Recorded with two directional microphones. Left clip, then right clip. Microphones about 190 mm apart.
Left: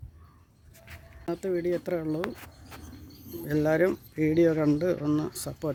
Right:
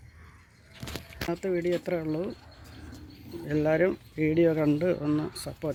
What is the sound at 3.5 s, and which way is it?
Speech, 10° left (ahead or behind).